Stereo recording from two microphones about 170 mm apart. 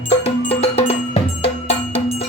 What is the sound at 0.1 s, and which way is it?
Music, 35° left (ahead or behind).